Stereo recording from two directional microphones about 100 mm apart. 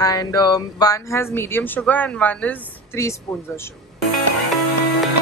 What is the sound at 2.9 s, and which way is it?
Speech, 25° left (ahead or behind).